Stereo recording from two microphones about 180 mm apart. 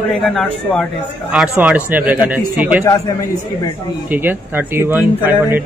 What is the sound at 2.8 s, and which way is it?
Speech, 20° left (ahead or behind).